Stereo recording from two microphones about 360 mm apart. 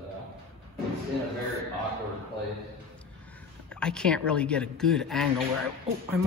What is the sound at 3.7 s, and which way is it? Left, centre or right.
Speech, centre.